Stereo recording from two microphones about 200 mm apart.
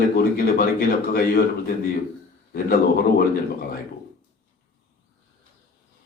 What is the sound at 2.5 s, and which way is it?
Speech, 45° left (ahead or behind).